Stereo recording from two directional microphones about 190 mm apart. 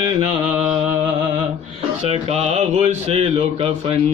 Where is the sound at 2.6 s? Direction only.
35° right (ahead or behind).